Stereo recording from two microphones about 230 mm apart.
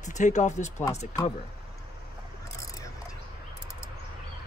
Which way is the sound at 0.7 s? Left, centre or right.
Centre.